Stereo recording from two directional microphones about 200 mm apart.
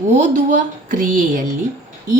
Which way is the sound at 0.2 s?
40° right (ahead or behind).